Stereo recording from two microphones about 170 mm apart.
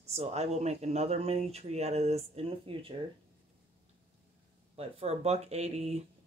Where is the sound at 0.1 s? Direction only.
40° right (ahead or behind).